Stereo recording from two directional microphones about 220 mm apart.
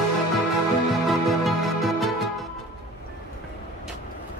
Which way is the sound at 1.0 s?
Centre (ahead or behind).